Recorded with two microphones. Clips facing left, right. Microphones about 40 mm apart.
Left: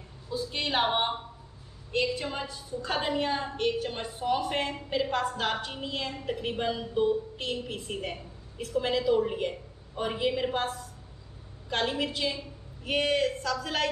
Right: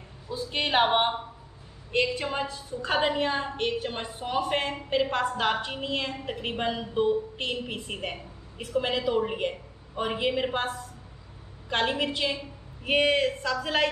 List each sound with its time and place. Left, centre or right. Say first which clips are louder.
0.3 s a woman's voice: right 3 dB; right
11.7 s a woman's voice: right 3 dB; right